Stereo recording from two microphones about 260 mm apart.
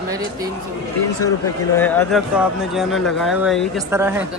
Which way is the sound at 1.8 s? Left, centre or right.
Centre.